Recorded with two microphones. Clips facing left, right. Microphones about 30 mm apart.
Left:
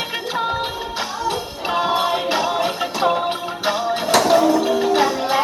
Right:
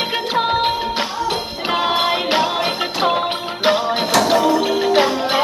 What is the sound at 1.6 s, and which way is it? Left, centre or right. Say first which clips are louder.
Music: right 1 dB; right.